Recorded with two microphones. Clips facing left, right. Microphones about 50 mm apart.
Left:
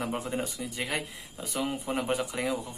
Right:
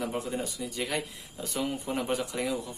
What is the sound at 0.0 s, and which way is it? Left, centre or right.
Speech, left.